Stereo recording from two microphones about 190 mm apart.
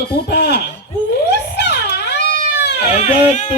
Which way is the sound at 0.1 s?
60° left (ahead or behind).